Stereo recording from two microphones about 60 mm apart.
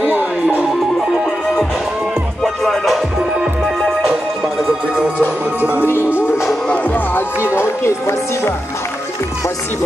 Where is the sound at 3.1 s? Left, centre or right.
Centre.